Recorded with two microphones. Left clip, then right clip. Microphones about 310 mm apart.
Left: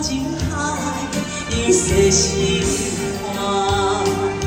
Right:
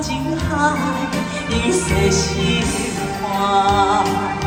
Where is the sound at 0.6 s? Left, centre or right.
Centre.